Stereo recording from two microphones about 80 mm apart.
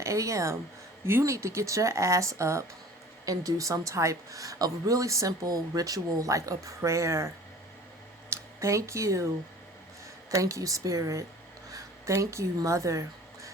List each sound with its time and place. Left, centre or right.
0.0 s speech: right
8.3 s speech: right
10.3 s speech: right
11.7 s a sound: right
12.5 s speech: right